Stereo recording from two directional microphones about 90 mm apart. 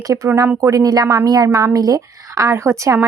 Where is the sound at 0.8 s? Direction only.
45° right (ahead or behind).